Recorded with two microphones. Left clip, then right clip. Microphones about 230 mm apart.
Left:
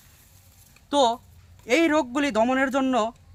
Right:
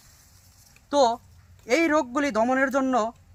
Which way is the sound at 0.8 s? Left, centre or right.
Centre.